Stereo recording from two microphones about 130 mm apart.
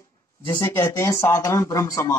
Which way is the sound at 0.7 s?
20° left (ahead or behind).